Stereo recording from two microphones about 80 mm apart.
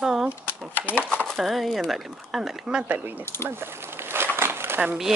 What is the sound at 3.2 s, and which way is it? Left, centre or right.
Speech, left.